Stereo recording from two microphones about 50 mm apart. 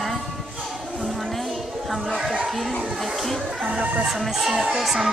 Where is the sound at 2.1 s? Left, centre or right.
Centre.